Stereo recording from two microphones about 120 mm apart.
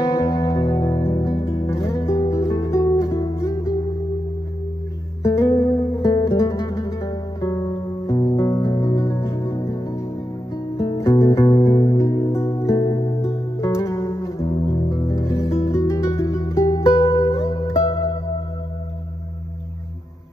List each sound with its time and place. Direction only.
0.0 s music: 30° left (ahead or behind)
5.2 s music: 25° left (ahead or behind)